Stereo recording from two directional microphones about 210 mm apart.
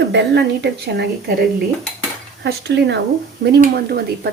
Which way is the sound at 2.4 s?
55° right (ahead or behind).